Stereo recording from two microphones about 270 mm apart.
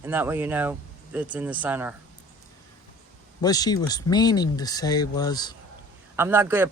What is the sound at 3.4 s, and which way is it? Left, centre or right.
Speech, centre.